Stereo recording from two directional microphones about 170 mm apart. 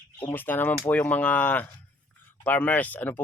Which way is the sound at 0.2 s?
10° left (ahead or behind).